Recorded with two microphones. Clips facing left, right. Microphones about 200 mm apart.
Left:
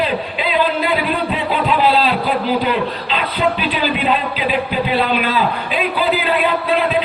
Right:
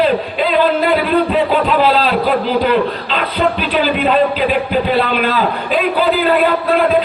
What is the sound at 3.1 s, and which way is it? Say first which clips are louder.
A man's voice: right 2 dB; 45° right (ahead or behind).